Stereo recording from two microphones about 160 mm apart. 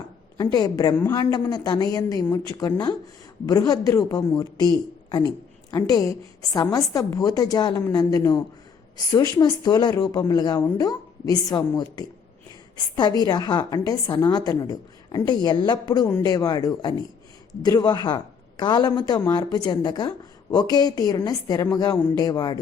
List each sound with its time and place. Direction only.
0.3 s a woman's voice: 25° left (ahead or behind)